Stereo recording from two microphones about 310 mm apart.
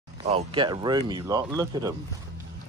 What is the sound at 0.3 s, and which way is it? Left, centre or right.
Speech, centre.